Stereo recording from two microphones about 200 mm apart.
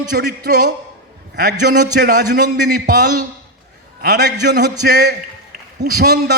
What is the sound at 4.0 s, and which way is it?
A man's voice, 55° right (ahead or behind).